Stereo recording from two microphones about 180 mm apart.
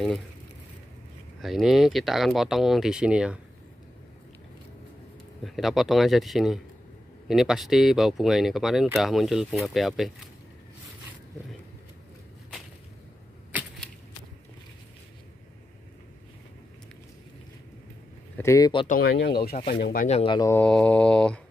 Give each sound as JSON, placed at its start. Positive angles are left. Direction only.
{"t": 1.4, "sound": "speech", "side_deg": 0}
{"t": 5.4, "sound": "speech", "side_deg": 0}
{"t": 18.4, "sound": "speech", "side_deg": 15}
{"t": 18.9, "sound": "speech", "side_deg": 60}
{"t": 20.1, "sound": "speech", "side_deg": 35}
{"t": 20.3, "sound": "speech", "side_deg": 15}